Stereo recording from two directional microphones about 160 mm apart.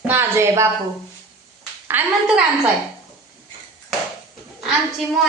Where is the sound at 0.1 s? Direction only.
15° right (ahead or behind).